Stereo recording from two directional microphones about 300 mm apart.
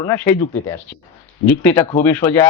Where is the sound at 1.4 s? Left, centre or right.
Centre.